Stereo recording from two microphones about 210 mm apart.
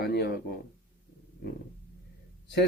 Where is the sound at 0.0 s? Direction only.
50° left (ahead or behind).